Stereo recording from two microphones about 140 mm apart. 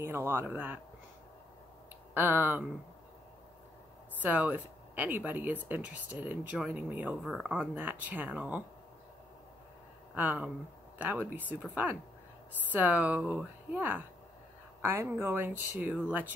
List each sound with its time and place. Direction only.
0.0 s speech: 15° right (ahead or behind)
2.1 s speech: 15° right (ahead or behind)
4.2 s speech: 10° right (ahead or behind)
7.2 s speech: centre (ahead or behind)
10.1 s speech: 10° right (ahead or behind)